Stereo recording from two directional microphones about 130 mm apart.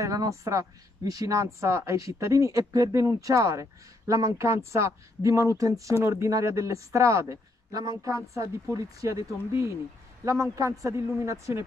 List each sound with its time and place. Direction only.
0.0 s speech: 25° right (ahead or behind)